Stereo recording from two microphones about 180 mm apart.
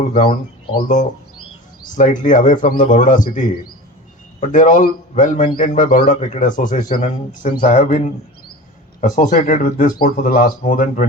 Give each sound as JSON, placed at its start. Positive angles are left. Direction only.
{"t": 0.1, "sound": "speech", "side_deg": 25}
{"t": 2.0, "sound": "speech", "side_deg": 45}